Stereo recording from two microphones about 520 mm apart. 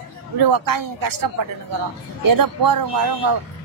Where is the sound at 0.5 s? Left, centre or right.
Right.